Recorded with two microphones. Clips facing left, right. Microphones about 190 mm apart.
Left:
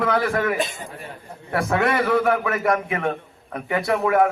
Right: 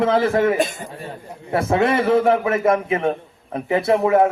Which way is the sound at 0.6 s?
50° right (ahead or behind).